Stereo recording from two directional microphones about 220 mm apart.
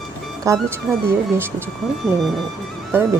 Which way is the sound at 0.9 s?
Centre (ahead or behind).